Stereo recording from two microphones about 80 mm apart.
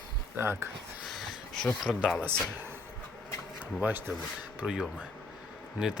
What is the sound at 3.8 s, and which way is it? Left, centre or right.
Speech, right.